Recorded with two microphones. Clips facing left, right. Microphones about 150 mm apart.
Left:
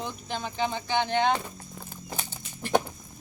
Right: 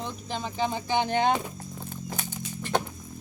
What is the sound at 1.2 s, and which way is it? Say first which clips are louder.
Speech: right 1 dB; 10° right (ahead or behind).